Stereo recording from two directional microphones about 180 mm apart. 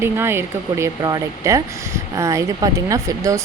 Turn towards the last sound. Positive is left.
turn(degrees=-20)  # may be behind; listen again after turning